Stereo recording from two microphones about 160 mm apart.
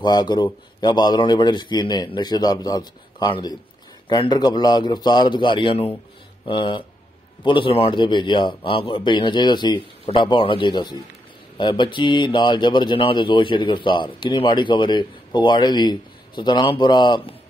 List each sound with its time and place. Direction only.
0.0 s speech: 25° left (ahead or behind)